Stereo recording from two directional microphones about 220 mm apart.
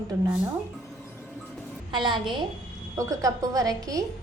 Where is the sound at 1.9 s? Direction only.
20° right (ahead or behind).